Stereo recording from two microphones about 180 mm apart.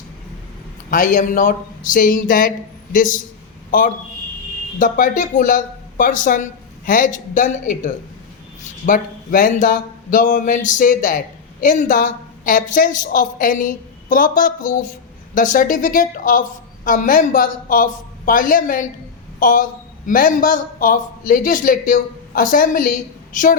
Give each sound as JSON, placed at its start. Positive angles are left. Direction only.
{"t": 0.9, "sound": "a woman's voice", "side_deg": 50}
{"t": 8.9, "sound": "a woman's voice", "side_deg": 45}